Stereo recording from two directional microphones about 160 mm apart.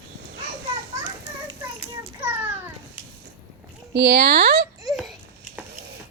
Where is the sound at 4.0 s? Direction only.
90° right.